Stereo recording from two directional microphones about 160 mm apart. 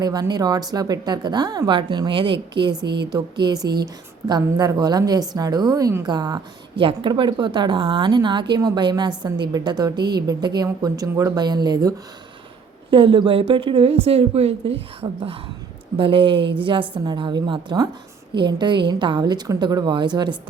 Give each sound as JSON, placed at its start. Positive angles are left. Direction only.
{"t": 0.0, "sound": "a woman's voice", "side_deg": -25}
{"t": 2.8, "sound": "speech", "side_deg": -90}
{"t": 3.1, "sound": "a woman's voice", "side_deg": -25}